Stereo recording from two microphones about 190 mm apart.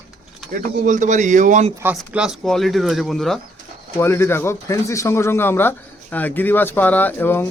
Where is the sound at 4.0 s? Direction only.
10° left (ahead or behind).